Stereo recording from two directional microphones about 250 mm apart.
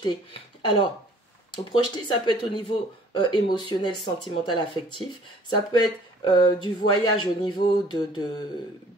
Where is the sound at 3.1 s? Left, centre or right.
Centre.